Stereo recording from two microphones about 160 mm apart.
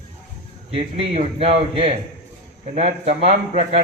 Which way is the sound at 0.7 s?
35° right (ahead or behind).